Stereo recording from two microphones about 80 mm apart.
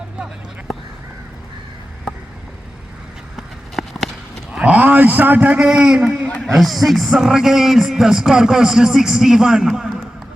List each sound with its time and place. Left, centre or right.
3.3 s run: centre
4.5 s a man's voice: centre
6.4 s speech: centre